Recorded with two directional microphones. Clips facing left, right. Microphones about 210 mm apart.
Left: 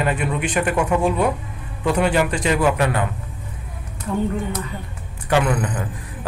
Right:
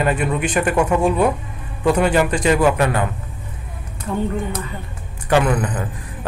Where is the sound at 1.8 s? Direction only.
45° right (ahead or behind).